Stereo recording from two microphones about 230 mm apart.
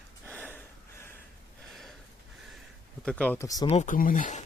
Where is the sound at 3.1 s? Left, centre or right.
Centre.